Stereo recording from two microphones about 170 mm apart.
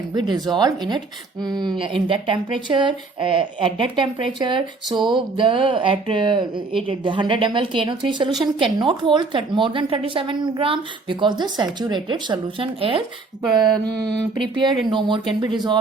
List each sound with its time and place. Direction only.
0.1 s a woman's voice: 25° right (ahead or behind)
8.3 s speech: centre (ahead or behind)
8.6 s a woman's voice: 30° right (ahead or behind)
14.4 s a woman's voice: 30° right (ahead or behind)